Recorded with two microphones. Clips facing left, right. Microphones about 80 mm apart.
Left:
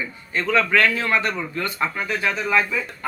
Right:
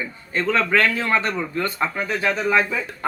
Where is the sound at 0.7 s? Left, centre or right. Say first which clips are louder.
Even; right.